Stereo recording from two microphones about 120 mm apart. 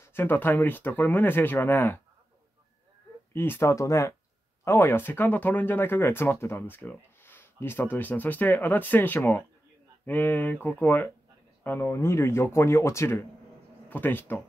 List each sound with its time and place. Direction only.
0.0 s speech: 20° left (ahead or behind)
3.3 s speech: 20° left (ahead or behind)